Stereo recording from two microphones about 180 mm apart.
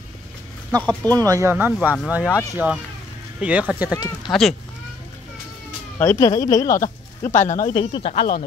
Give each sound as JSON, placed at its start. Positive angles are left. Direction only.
{"t": 0.7, "sound": "speech", "side_deg": -20}
{"t": 5.9, "sound": "speech", "side_deg": 15}
{"t": 7.2, "sound": "speech", "side_deg": 40}
{"t": 7.7, "sound": "speech", "side_deg": 30}